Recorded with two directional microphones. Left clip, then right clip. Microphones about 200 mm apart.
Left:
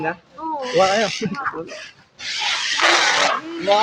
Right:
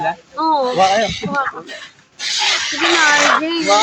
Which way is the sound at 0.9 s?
25° left (ahead or behind).